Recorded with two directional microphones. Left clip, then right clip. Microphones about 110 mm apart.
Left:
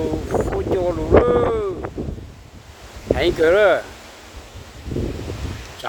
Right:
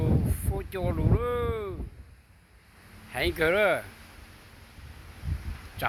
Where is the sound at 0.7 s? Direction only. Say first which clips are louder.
Left 16 dB; 25° right (ahead or behind).